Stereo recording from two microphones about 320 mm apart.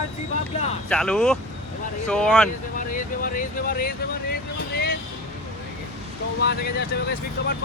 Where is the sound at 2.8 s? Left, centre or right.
Left.